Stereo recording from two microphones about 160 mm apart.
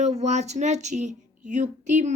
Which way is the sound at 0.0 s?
45° right (ahead or behind).